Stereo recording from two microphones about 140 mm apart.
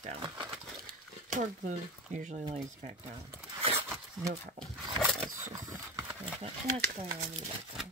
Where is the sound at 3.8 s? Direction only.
15° right (ahead or behind).